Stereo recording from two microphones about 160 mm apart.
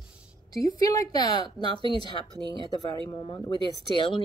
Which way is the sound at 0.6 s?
20° left (ahead or behind).